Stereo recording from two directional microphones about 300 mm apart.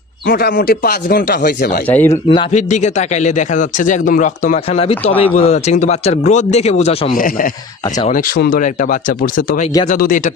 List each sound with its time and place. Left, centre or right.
0.3 s speech: left
1.9 s a man's voice: centre
2.5 s speech: left
9.8 s speech: left